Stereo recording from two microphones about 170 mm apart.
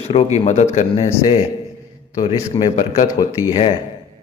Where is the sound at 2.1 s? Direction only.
25° left (ahead or behind).